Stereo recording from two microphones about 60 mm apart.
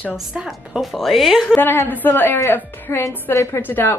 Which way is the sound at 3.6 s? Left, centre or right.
Left.